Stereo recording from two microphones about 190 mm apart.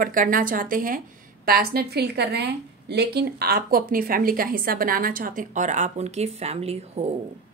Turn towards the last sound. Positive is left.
turn(degrees=-35)  # may be behind; listen again after turning